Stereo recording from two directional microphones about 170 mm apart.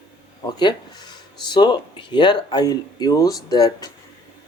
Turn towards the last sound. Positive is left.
turn(degrees=25)  # may be behind; listen again after turning